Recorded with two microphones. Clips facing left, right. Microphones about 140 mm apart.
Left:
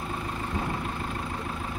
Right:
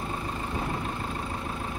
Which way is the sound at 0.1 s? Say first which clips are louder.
Even; centre (ahead or behind).